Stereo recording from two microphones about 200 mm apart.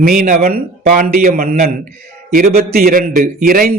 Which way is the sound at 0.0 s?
45° right (ahead or behind).